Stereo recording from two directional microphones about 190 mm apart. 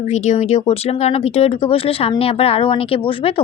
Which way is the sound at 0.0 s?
35° left (ahead or behind).